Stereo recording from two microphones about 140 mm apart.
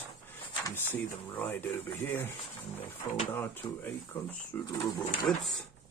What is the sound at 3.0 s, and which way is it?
Speech, 30° left (ahead or behind).